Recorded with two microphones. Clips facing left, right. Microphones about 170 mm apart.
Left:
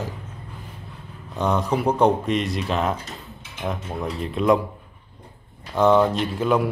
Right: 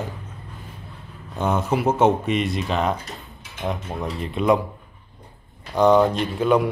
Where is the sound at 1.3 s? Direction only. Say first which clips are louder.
Even; 5° right (ahead or behind).